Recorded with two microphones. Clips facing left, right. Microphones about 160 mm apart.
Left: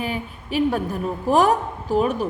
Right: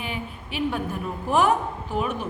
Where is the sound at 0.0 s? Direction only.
40° left (ahead or behind).